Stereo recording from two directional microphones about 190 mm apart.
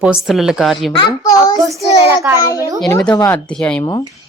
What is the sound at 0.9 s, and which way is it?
Speech, 20° left (ahead or behind).